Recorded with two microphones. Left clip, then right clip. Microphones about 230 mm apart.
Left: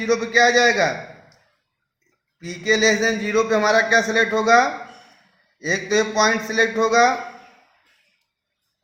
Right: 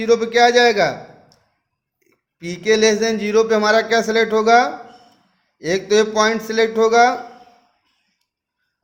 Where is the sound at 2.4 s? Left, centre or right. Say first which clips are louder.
Right 3 dB; right.